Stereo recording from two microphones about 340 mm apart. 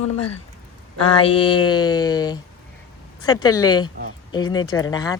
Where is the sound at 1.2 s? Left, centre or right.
Centre.